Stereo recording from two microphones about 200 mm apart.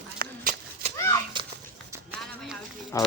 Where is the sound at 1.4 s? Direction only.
25° right (ahead or behind).